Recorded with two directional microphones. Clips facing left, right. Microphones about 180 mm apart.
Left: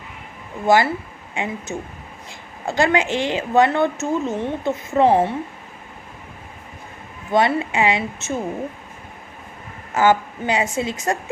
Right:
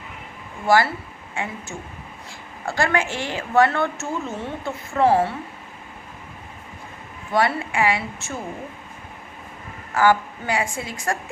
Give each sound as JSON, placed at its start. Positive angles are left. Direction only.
{"t": 0.7, "sound": "a woman's voice", "side_deg": 20}
{"t": 7.3, "sound": "a woman's voice", "side_deg": 20}
{"t": 9.9, "sound": "a woman's voice", "side_deg": 20}